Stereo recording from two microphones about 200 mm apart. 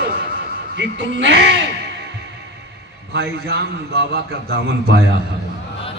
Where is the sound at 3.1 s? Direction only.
55° right (ahead or behind).